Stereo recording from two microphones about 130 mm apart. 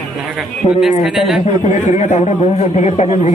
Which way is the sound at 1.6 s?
65° left (ahead or behind).